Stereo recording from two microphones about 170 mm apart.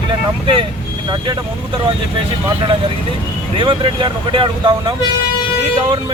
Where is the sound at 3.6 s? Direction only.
25° right (ahead or behind).